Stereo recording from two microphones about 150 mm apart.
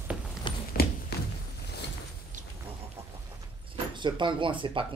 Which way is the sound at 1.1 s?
90° left.